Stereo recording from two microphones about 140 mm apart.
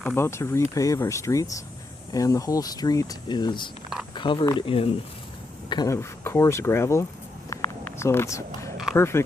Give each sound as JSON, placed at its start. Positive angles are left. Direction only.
{"t": 0.2, "sound": "speech", "side_deg": 20}
{"t": 5.9, "sound": "speech", "side_deg": 20}
{"t": 7.5, "sound": "a sound", "side_deg": 20}
{"t": 9.0, "sound": "speech", "side_deg": 20}